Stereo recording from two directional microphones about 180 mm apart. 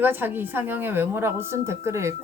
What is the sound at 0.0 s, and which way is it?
A woman's voice, 10° right (ahead or behind).